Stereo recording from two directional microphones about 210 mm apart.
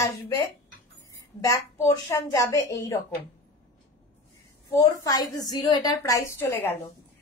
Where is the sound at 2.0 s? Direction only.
15° left (ahead or behind).